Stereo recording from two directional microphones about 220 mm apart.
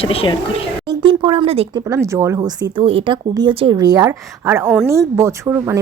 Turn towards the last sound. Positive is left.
turn(degrees=-10)  # may be behind; listen again after turning